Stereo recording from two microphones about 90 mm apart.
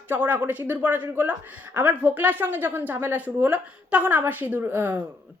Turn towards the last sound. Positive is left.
turn(degrees=-20)  # may be behind; listen again after turning